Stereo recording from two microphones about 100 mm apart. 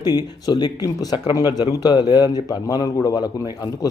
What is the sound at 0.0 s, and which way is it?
Speech, 40° left (ahead or behind).